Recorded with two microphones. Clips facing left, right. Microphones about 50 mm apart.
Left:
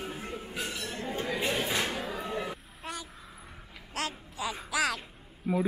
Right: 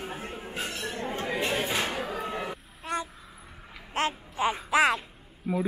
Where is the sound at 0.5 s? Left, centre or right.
Right.